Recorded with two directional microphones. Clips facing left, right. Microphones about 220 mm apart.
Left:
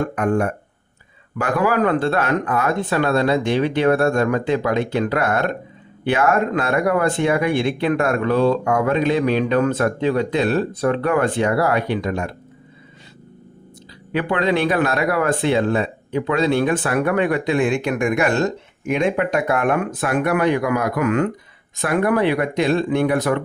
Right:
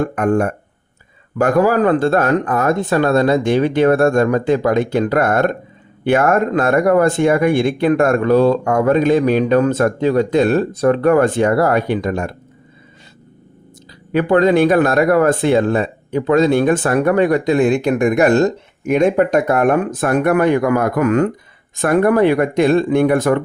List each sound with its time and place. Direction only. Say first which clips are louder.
0.0 s speech: right 4 dB; 45° right (ahead or behind)
14.1 s speech: right 7 dB; 45° right (ahead or behind)